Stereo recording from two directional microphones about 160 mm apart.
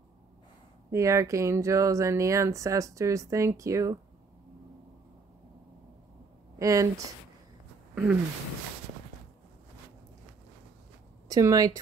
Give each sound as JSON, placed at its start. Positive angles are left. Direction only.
{"t": 0.9, "sound": "speech", "side_deg": -20}
{"t": 6.6, "sound": "speech", "side_deg": -20}
{"t": 7.9, "sound": "a sound", "side_deg": -10}
{"t": 11.2, "sound": "speech", "side_deg": -20}